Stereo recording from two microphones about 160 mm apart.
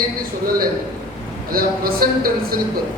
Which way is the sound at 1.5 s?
65° right (ahead or behind).